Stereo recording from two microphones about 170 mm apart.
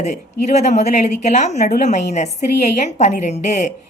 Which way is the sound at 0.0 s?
45° left (ahead or behind).